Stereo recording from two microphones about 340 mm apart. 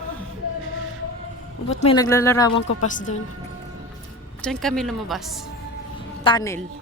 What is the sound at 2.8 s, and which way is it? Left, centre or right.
Speech, left.